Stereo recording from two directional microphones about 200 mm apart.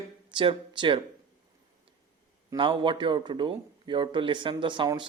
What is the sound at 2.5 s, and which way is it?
Speech, 25° right (ahead or behind).